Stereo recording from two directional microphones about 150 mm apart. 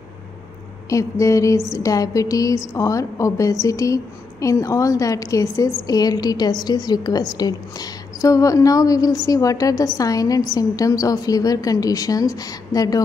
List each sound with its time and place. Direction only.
0.8 s a woman's voice: 20° left (ahead or behind)